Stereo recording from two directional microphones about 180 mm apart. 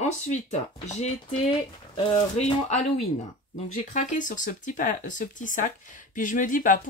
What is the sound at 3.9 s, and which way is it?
Speech, 45° left (ahead or behind).